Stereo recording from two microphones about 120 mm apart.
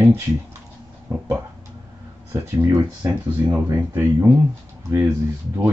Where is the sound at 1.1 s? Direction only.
20° right (ahead or behind).